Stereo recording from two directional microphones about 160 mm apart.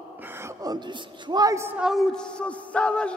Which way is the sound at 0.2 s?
15° right (ahead or behind).